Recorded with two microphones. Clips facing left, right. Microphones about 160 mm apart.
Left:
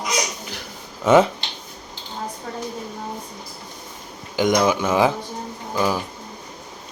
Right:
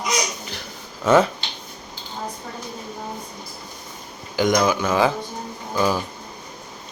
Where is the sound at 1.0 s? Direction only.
15° left (ahead or behind).